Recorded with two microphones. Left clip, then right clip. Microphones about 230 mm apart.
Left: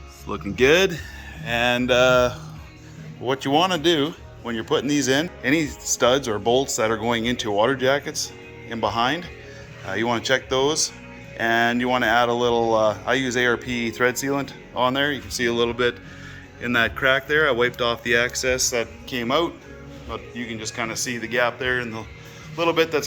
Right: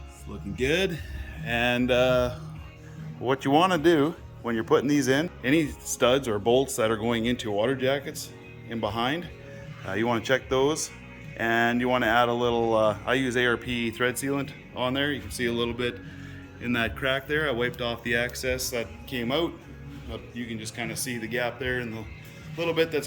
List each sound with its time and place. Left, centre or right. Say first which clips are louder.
0.5 s speech: left 9 dB; centre